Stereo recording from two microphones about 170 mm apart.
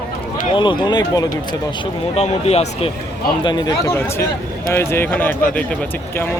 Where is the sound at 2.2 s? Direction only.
40° left (ahead or behind).